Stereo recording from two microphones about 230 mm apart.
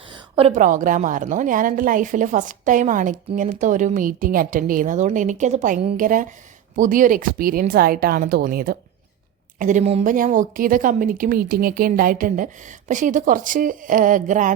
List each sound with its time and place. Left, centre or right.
0.1 s a woman's voice: right